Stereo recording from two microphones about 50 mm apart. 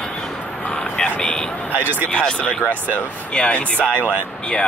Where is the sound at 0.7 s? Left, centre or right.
Centre.